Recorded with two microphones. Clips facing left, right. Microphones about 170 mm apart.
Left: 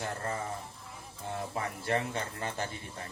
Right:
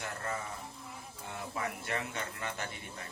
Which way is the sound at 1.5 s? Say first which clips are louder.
Left 4 dB; 30° left (ahead or behind).